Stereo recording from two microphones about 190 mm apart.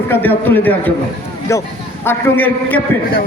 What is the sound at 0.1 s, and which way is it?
Speech, 10° left (ahead or behind).